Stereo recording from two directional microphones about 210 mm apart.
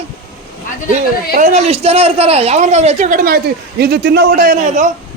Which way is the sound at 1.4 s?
35° right (ahead or behind).